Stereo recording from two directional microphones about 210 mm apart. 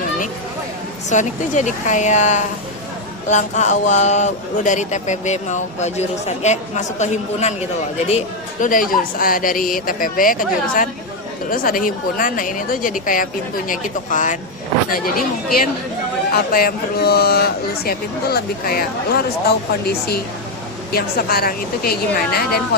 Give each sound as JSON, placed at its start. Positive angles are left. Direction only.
{"t": 1.1, "sound": "speech", "side_deg": 35}
{"t": 8.6, "sound": "speech", "side_deg": 40}
{"t": 16.3, "sound": "speech", "side_deg": 45}